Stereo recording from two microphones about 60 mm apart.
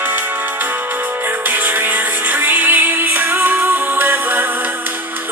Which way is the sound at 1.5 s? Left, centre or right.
Right.